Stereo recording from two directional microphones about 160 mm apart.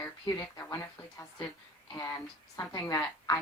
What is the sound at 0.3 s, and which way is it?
A woman's voice, 20° left (ahead or behind).